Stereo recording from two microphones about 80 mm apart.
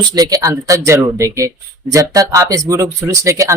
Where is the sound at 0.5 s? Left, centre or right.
Right.